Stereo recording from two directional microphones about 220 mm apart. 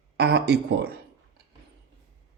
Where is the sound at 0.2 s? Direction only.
50° right (ahead or behind).